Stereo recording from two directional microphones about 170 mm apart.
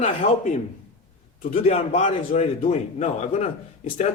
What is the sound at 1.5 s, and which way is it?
A man's voice, 35° left (ahead or behind).